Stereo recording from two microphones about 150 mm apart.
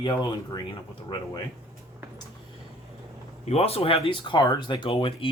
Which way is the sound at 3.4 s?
45° left (ahead or behind).